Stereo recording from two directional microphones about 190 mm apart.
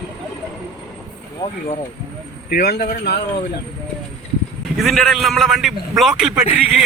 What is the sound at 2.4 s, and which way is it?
Speech, 55° left (ahead or behind).